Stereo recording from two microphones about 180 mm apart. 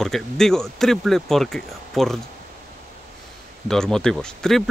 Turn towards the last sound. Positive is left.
turn(degrees=5)  # may be behind; listen again after turning